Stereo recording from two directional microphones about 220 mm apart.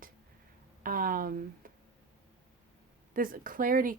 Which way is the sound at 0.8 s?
40° right (ahead or behind).